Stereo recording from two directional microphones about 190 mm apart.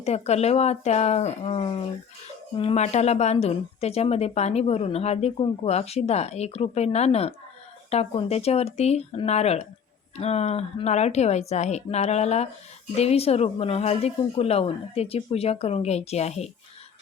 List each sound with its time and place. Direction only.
0.0 s speech: 35° left (ahead or behind)